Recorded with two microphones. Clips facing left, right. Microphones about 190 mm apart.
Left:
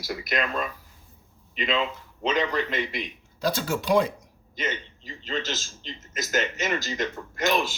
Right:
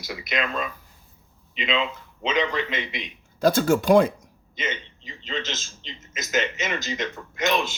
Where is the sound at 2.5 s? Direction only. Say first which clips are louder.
Left 1 dB; 20° right (ahead or behind).